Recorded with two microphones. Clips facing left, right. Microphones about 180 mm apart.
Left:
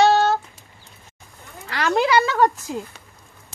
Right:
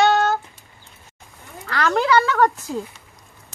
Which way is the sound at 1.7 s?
15° left (ahead or behind).